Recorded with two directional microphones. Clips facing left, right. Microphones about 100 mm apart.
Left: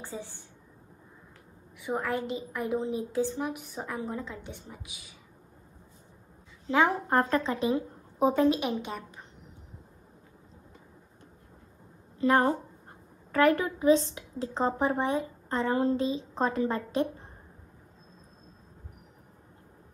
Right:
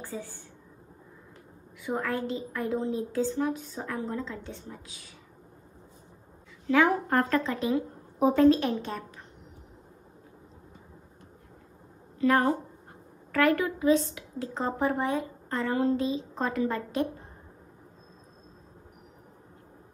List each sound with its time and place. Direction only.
0.0 s speech: 20° left (ahead or behind)
1.8 s a woman's voice: 20° left (ahead or behind)
6.7 s speech: 25° left (ahead or behind)
12.2 s a woman's voice: 25° left (ahead or behind)